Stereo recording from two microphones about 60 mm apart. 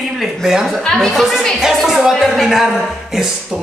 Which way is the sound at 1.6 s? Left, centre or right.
Centre.